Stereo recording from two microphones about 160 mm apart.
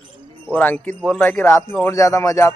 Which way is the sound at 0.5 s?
10° left (ahead or behind).